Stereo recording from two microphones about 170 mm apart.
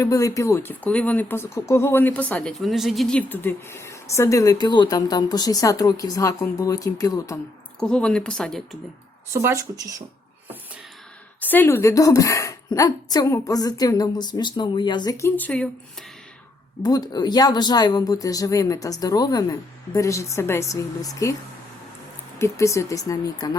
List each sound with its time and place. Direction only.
0.0 s speech: 20° left (ahead or behind)
7.8 s speech: 5° left (ahead or behind)
9.3 s speech: 15° right (ahead or behind)
11.3 s speech: 10° left (ahead or behind)
15.4 s speech: 10° left (ahead or behind)
16.8 s speech: 25° left (ahead or behind)
22.4 s speech: 15° left (ahead or behind)